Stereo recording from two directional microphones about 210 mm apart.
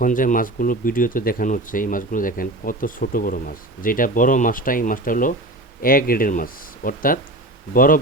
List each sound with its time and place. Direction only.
0.0 s speech: 40° left (ahead or behind)